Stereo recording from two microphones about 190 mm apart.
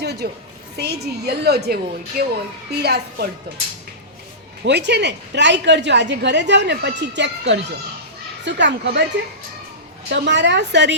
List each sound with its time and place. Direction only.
0.0 s a sound: 60° right (ahead or behind)
0.8 s a woman's voice: 60° right (ahead or behind)
4.6 s a woman's voice: 65° right (ahead or behind)
10.1 s a woman's voice: 65° right (ahead or behind)